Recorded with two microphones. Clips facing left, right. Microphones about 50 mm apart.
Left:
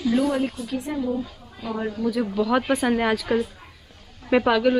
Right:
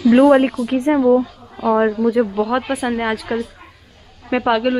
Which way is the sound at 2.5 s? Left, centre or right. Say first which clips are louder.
Right 1 dB; centre.